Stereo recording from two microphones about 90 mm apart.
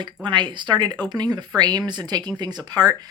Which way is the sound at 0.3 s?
60° right (ahead or behind).